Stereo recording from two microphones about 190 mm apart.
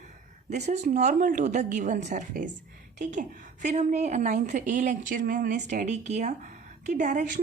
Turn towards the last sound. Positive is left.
turn(degrees=-40)  # may be behind; listen again after turning